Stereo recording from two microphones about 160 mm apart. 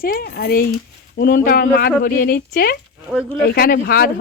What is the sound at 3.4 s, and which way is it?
Speech, 70° left (ahead or behind).